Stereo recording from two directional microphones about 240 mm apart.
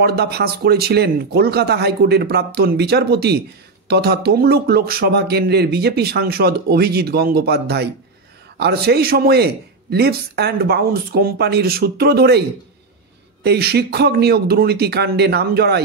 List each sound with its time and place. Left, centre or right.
0.0 s speech: right